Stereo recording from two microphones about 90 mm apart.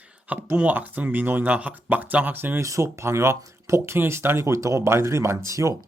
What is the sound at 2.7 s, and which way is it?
Speech, 35° right (ahead or behind).